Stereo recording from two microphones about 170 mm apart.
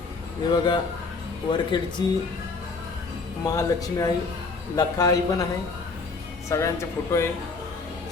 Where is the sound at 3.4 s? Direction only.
20° left (ahead or behind).